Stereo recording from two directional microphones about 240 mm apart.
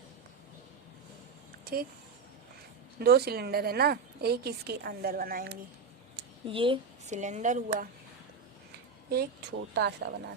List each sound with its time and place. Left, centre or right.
1.6 s speech: right
3.0 s a woman's voice: right
6.4 s a woman's voice: right
9.0 s speech: right